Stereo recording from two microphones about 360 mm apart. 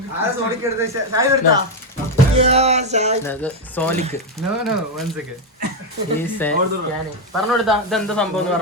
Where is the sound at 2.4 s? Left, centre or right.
Centre.